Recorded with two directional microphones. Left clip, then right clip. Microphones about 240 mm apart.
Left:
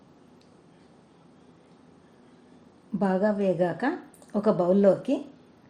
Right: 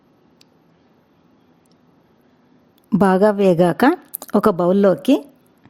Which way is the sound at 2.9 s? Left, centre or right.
Right.